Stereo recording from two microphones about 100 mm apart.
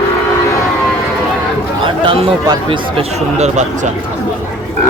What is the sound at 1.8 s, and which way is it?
Speech, 60° right (ahead or behind).